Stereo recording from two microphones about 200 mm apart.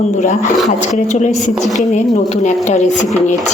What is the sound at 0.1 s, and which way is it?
A woman's voice, 40° left (ahead or behind).